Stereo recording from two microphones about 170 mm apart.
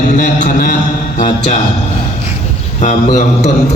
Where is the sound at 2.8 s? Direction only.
45° left (ahead or behind).